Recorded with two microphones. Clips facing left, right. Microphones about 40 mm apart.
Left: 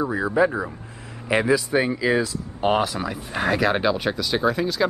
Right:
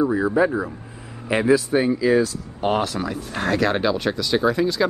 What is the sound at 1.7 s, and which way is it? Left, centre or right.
Speech, centre.